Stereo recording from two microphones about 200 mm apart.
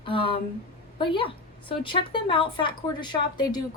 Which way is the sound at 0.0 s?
25° left (ahead or behind).